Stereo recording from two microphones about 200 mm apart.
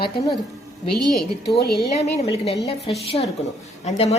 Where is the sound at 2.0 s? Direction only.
30° left (ahead or behind).